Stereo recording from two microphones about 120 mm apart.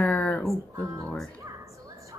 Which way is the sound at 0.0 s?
10° left (ahead or behind).